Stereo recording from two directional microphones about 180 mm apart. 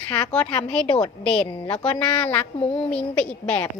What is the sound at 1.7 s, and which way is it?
A woman's voice, 5° left (ahead or behind).